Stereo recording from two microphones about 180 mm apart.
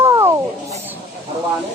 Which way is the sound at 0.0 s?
15° right (ahead or behind).